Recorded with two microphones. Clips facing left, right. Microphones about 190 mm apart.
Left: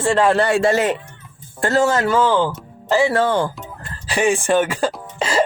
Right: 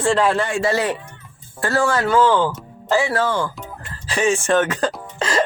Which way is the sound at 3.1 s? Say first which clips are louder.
Left 3 dB; 30° left (ahead or behind).